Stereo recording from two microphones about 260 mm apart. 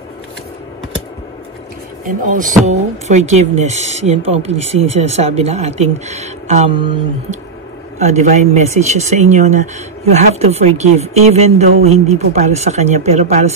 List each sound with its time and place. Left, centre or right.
2.0 s speech: right